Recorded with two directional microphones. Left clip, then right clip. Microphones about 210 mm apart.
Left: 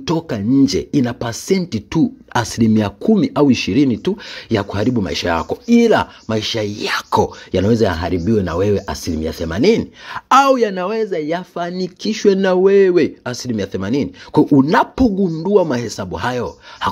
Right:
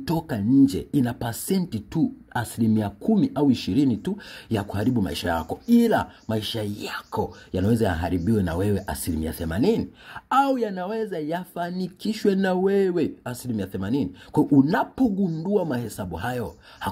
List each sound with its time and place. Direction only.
0.0 s speech: 15° left (ahead or behind)
0.6 s speech: 25° left (ahead or behind)
2.3 s speech: 30° left (ahead or behind)
6.9 s speech: 35° left (ahead or behind)
7.5 s speech: 20° left (ahead or behind)
15.0 s speech: 45° left (ahead or behind)
15.4 s speech: 25° left (ahead or behind)